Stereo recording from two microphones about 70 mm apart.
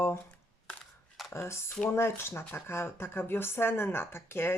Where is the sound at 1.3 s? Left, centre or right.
Left.